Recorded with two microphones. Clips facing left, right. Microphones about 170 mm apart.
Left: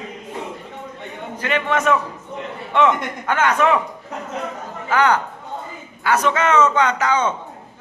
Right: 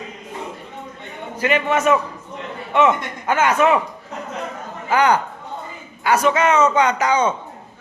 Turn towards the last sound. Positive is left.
turn(degrees=-15)  # may be behind; listen again after turning